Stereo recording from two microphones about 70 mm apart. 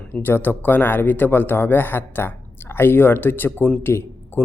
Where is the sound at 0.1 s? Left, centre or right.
Left.